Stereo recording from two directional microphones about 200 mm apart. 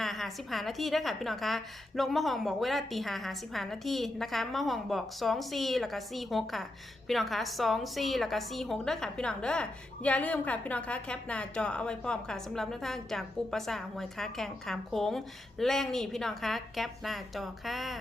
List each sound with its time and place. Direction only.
0.0 s a woman's voice: centre (ahead or behind)